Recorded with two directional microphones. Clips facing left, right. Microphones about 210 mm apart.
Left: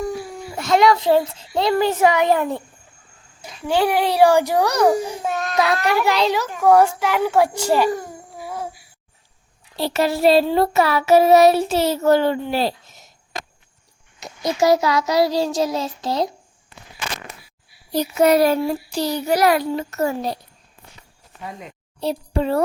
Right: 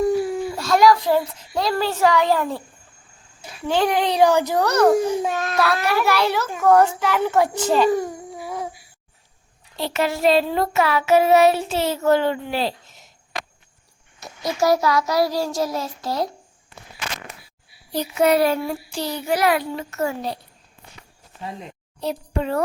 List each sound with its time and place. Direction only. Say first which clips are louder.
0.5 s a child's voice: left 1 dB; 20° left (ahead or behind)
3.7 s a child's voice: left 1 dB; 10° left (ahead or behind)
5.5 s a child's voice: left 2 dB; 15° left (ahead or behind)
9.7 s child singing: left 3 dB; 35° left (ahead or behind)
14.2 s a child's voice: left 3 dB; 20° left (ahead or behind)
17.9 s child singing: left 2 dB; 40° left (ahead or behind)
22.0 s child singing: left 3 dB; 30° left (ahead or behind)